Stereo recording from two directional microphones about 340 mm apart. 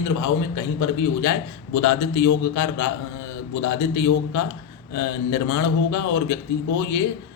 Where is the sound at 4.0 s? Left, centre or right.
Left.